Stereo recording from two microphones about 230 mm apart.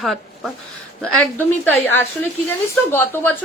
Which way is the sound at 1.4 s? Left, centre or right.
Centre.